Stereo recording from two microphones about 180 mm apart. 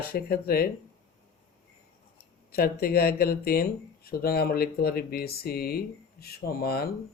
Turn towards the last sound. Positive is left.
turn(degrees=60)  # may be behind; listen again after turning